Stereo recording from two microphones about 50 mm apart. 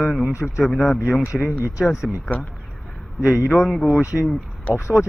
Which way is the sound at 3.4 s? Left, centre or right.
Centre.